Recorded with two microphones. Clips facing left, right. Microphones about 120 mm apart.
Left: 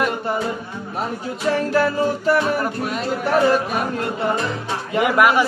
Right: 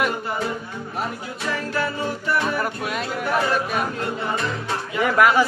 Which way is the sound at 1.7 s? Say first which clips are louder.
Left 6 dB; 35° left (ahead or behind).